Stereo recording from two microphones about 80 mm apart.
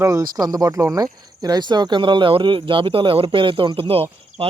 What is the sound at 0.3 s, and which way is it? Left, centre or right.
Speech, right.